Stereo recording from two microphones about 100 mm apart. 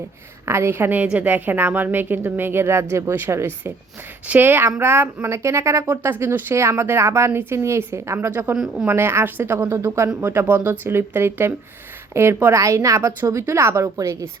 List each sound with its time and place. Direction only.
0.4 s speech: 25° right (ahead or behind)
8.5 s speech: 5° right (ahead or behind)
8.9 s a woman's voice: 25° right (ahead or behind)